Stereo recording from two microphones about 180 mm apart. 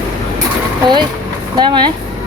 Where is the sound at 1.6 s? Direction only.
25° right (ahead or behind).